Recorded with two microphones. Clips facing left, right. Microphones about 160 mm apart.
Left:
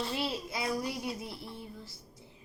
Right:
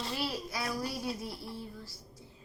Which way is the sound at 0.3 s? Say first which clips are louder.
Left 2 dB; 20° left (ahead or behind).